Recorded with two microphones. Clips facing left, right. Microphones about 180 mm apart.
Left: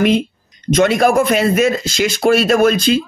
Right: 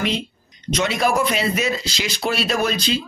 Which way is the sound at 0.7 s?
50° left (ahead or behind).